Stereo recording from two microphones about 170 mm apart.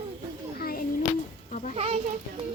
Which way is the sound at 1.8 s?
35° right (ahead or behind).